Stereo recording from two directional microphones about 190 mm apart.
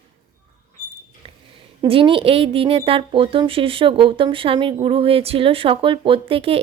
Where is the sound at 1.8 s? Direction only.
25° right (ahead or behind).